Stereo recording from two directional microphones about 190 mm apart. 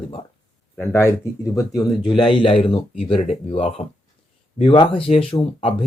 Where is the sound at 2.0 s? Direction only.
25° left (ahead or behind).